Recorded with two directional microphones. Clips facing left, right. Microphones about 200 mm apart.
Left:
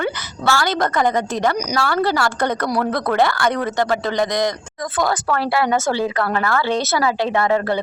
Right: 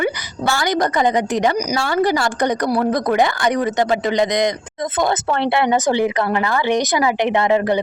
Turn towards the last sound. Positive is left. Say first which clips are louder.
# right 2 dB
turn(degrees=-20)  # may be behind; listen again after turning